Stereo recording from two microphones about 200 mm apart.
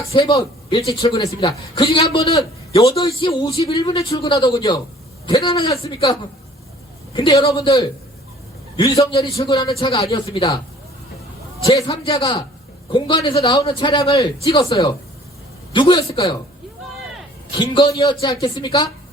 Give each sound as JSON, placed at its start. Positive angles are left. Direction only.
{"t": 0.1, "sound": "a man's voice", "side_deg": 25}
{"t": 7.1, "sound": "a man's voice", "side_deg": 20}
{"t": 11.6, "sound": "a man's voice", "side_deg": 25}
{"t": 17.6, "sound": "a man's voice", "side_deg": 25}